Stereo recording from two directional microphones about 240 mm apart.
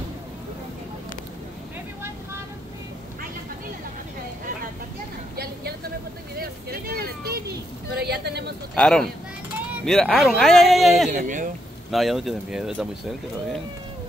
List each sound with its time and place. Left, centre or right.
5.3 s vehicle: right
6.3 s a sound: right
8.7 s speech: centre
11.1 s speech: right
11.9 s speech: centre